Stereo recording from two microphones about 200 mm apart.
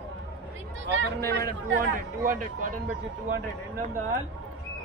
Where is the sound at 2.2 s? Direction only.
40° right (ahead or behind).